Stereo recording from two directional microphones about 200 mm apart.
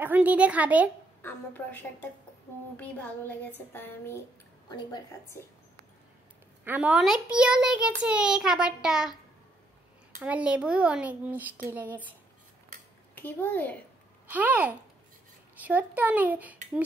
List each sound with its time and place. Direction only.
0.0 s a child's voice: 10° right (ahead or behind)
1.2 s a woman's voice: 10° left (ahead or behind)
6.6 s speech: 5° right (ahead or behind)
10.1 s a child's voice: 5° right (ahead or behind)
13.1 s a woman's voice: 10° left (ahead or behind)
14.3 s a child's voice: 10° right (ahead or behind)